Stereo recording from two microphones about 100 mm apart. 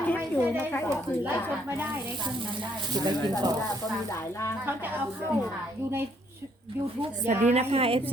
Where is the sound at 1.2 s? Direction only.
20° right (ahead or behind).